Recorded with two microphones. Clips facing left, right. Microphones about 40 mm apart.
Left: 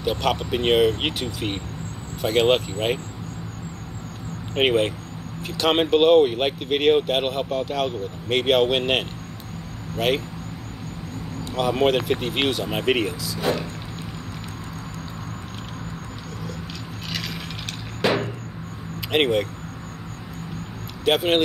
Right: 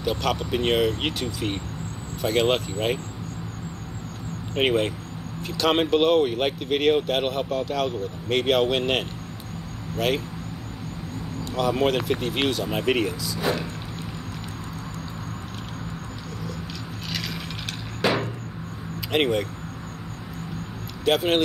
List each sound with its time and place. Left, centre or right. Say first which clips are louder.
0.0 s speech: left 2 dB; centre
4.6 s speech: left 2 dB; centre
11.5 s speech: left 2 dB; centre
19.1 s speech: left 2 dB; centre
21.0 s speech: left 1 dB; centre